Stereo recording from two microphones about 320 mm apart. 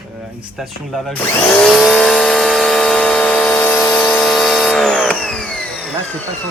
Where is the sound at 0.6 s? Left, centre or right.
Centre.